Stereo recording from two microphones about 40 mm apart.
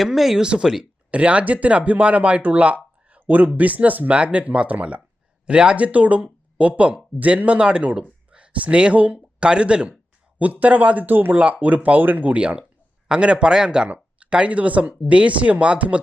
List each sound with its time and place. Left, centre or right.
0.0 s speech: centre
0.3 s speech: right
1.1 s speech: right
4.1 s speech: right
8.3 s a sound: right
8.8 s speech: right
9.1 s speech: right
10.3 s speech: right
11.3 s speech: right
12.4 s a man's voice: right